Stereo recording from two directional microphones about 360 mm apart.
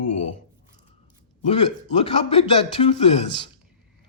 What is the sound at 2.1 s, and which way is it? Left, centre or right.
Speech, centre.